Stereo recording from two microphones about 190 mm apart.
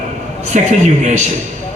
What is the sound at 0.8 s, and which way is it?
Speech, 40° right (ahead or behind).